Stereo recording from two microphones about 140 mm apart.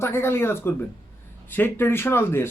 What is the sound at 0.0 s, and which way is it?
Speech, 20° left (ahead or behind).